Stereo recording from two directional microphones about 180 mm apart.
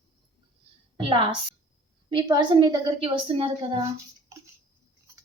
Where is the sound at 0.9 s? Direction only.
30° right (ahead or behind).